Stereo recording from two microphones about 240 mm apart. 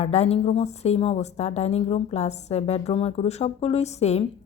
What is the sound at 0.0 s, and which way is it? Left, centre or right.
A woman's voice, left.